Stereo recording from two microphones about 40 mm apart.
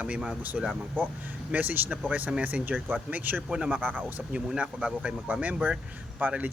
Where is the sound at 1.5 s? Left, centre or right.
Right.